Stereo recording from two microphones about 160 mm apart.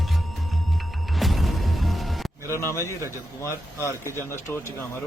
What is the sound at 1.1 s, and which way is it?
Music, centre (ahead or behind).